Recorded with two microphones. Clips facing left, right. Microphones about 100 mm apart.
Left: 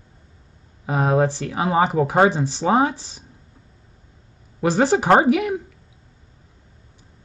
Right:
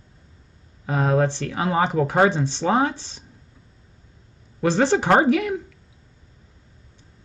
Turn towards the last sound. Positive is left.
turn(degrees=10)  # may be behind; listen again after turning